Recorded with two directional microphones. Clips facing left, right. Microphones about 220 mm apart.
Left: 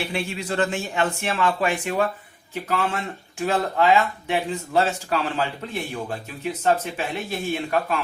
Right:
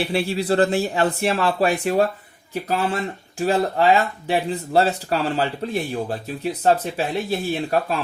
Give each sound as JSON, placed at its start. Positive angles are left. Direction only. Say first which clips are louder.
{"t": 0.0, "sound": "speech", "louder": "right 6 dB", "side_deg": -35}